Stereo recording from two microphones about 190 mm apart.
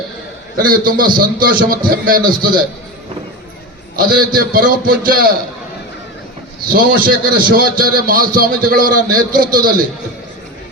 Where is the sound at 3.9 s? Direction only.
50° right (ahead or behind).